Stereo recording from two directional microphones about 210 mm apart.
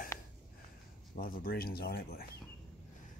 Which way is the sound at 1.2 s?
45° left (ahead or behind).